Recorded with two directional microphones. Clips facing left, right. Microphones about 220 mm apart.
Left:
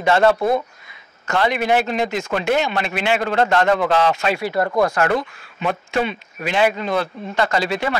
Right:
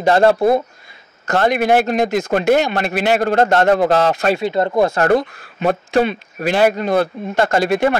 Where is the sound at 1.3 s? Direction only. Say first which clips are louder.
Right 4 dB; 45° right (ahead or behind).